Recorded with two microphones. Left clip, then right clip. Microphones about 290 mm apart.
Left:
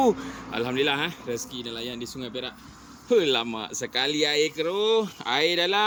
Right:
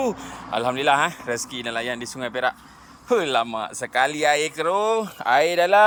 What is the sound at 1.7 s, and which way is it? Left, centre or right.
Speech, right.